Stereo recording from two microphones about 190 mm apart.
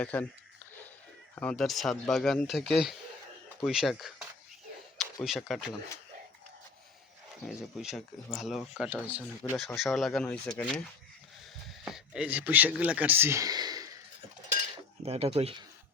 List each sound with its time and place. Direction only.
0.0 s speech: 10° left (ahead or behind)
1.4 s speech: 5° left (ahead or behind)
7.4 s speech: centre (ahead or behind)
11.9 s speech: 5° right (ahead or behind); by 13.9 s 20° right (ahead or behind)
15.0 s speech: 30° right (ahead or behind)